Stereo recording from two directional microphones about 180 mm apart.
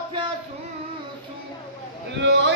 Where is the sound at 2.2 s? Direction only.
80° right.